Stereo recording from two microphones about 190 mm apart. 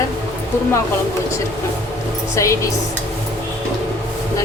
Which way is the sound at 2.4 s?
15° left (ahead or behind).